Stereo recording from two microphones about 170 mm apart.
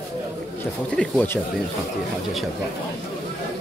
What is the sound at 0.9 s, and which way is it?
Speech, 10° left (ahead or behind).